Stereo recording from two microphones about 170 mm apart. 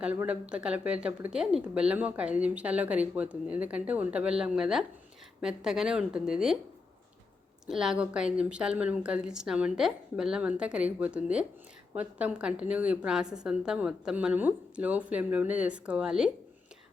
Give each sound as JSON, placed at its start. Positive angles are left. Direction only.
{"t": 0.0, "sound": "a woman's voice", "side_deg": -10}
{"t": 7.7, "sound": "a woman's voice", "side_deg": -5}